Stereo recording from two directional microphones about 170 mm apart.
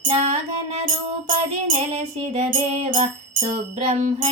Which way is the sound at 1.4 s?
35° right (ahead or behind).